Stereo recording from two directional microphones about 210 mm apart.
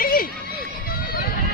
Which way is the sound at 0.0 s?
45° left (ahead or behind).